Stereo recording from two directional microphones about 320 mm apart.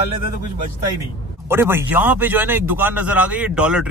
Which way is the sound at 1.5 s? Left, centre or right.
Centre.